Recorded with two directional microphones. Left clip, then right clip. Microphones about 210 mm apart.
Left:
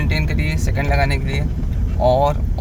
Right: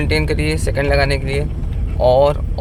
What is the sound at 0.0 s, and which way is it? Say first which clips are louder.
Speech: right 5 dB; 20° right (ahead or behind).